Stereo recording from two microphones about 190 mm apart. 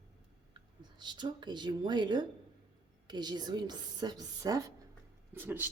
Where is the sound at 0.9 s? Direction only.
25° right (ahead or behind).